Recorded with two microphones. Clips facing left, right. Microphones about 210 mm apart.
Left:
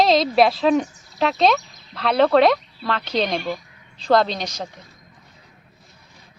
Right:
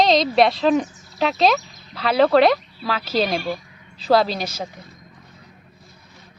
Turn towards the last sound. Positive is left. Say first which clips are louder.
# even
turn(degrees=-5)  # may be behind; listen again after turning